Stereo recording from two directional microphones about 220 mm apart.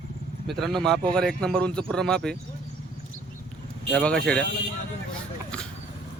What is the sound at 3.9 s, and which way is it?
Speech, 5° left (ahead or behind).